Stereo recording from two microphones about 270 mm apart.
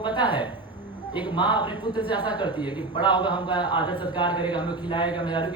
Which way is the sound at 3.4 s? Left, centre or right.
Centre.